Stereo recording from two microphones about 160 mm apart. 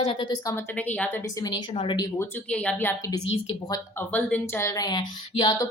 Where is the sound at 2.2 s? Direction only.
10° left (ahead or behind); by 5.7 s 30° left (ahead or behind).